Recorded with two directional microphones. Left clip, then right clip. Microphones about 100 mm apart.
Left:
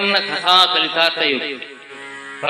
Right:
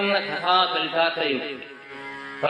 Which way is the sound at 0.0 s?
40° left (ahead or behind).